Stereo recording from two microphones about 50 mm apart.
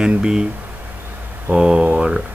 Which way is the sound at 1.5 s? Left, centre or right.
Centre.